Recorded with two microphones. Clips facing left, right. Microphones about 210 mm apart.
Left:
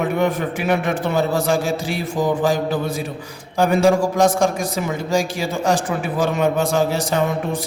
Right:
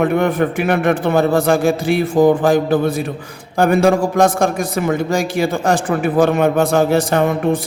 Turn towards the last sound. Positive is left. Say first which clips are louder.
# right 5 dB
turn(degrees=-55)  # may be behind; listen again after turning